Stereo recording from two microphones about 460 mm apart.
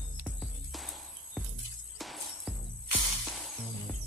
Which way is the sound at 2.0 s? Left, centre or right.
Centre.